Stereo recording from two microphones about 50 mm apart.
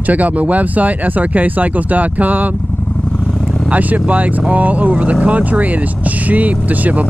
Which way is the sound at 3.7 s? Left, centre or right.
Right.